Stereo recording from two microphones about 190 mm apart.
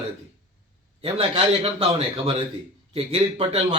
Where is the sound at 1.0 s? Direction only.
30° right (ahead or behind).